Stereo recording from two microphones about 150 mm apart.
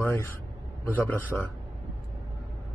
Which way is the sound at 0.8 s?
15° left (ahead or behind).